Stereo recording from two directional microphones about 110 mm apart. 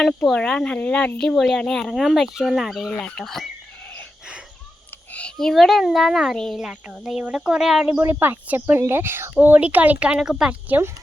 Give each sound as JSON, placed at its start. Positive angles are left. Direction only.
{"t": 0.3, "sound": "speech", "side_deg": 10}
{"t": 5.1, "sound": "speech", "side_deg": 5}
{"t": 8.0, "sound": "a woman's voice", "side_deg": -20}
{"t": 10.7, "sound": "a woman's voice", "side_deg": -20}